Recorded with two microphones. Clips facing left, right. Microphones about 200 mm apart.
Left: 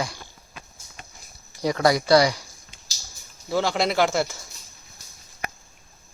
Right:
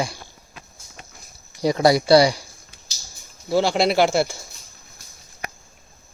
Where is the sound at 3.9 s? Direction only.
30° right (ahead or behind).